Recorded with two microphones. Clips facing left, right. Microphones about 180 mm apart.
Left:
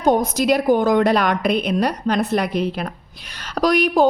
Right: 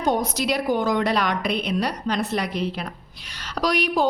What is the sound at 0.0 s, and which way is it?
A woman's voice, 50° left (ahead or behind).